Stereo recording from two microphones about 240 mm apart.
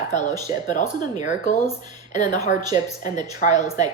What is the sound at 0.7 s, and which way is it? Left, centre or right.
Speech, left.